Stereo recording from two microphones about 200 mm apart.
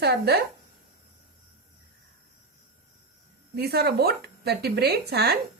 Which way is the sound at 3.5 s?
50° right (ahead or behind).